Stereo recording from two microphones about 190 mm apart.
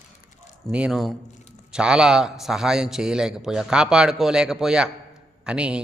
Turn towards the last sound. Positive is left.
turn(degrees=-5)  # may be behind; listen again after turning